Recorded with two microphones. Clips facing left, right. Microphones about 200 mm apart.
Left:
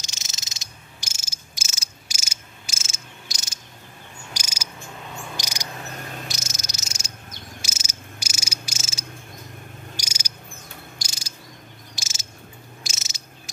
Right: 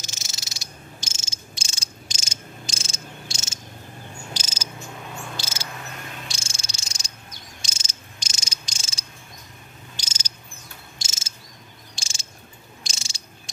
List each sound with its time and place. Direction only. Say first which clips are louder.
0.0 s frog: right 3 dB; 20° left (ahead or behind)
1.0 s insect: right 5 dB; 25° right (ahead or behind)
2.0 s mechanisms: right 6 dB; 10° left (ahead or behind)
2.7 s cricket: right 5 dB; 30° right (ahead or behind)
4.3 s cricket: even; 10° left (ahead or behind)
6.2 s cricket: left 3 dB; 30° right (ahead or behind)
7.6 s insect: left 4 dB; 5° left (ahead or behind)
8.2 s cricket: left 4 dB; 10° left (ahead or behind)
8.7 s cricket: left 5 dB; 30° right (ahead or behind)
9.9 s cricket: left 4 dB; 10° left (ahead or behind)
11.0 s cricket: left 3 dB; 25° right (ahead or behind)
11.9 s cricket: left 2 dB; 5° left (ahead or behind)
12.9 s cricket: left 1 dB; 30° right (ahead or behind)